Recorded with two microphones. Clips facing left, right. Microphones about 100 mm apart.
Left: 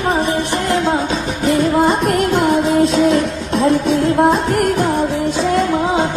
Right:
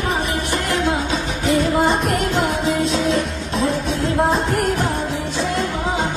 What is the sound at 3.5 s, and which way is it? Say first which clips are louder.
Music: left 7 dB; 60° left (ahead or behind).